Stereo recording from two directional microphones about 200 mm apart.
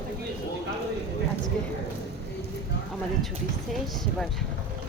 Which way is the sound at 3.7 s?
Centre (ahead or behind).